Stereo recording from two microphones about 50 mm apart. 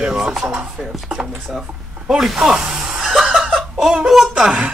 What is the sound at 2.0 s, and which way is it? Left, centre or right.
Snicker, centre.